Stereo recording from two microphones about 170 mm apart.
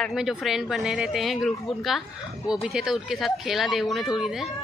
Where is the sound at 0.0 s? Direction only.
Centre (ahead or behind).